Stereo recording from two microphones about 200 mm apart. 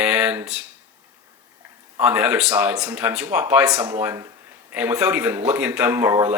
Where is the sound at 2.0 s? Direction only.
5° right (ahead or behind).